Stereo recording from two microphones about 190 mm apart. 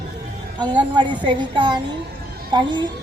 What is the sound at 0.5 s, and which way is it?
Speech, 25° right (ahead or behind).